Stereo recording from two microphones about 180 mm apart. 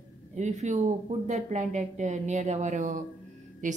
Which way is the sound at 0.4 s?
40° right (ahead or behind).